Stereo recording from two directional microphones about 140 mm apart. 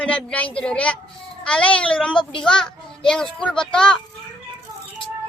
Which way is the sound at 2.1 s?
35° left (ahead or behind).